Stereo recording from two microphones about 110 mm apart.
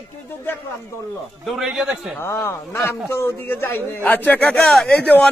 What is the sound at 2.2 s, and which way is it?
Speech, 25° left (ahead or behind).